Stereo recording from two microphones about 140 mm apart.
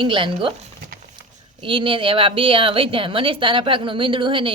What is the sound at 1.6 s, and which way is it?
A woman's voice, 35° right (ahead or behind).